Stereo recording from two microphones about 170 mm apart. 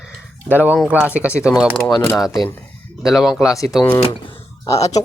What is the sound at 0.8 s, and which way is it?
A man's voice, 10° right (ahead or behind).